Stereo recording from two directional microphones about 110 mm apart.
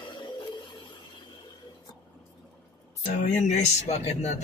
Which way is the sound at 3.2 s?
90° left.